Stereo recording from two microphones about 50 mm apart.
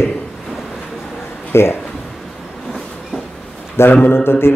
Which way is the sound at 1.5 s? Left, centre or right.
Left.